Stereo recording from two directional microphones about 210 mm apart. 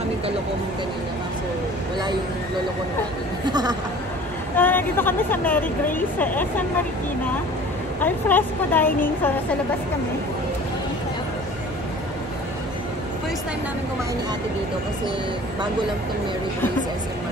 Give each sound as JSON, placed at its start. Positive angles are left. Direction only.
{"t": 3.4, "sound": "speech", "side_deg": -20}
{"t": 4.6, "sound": "a woman's voice", "side_deg": 10}
{"t": 8.0, "sound": "a woman's voice", "side_deg": 10}